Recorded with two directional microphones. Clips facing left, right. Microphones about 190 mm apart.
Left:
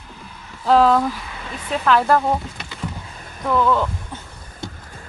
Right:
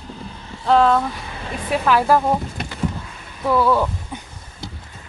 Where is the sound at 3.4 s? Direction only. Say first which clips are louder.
Right 1 dB; 10° right (ahead or behind).